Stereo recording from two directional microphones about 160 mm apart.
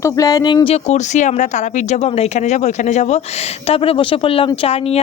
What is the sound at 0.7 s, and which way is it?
Speech, 45° left (ahead or behind).